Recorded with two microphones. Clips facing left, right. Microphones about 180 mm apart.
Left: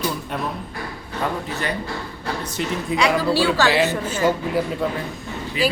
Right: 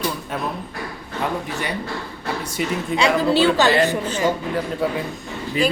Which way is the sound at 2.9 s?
25° right (ahead or behind).